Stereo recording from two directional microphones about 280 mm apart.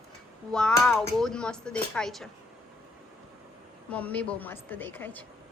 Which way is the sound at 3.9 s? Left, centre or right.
Centre.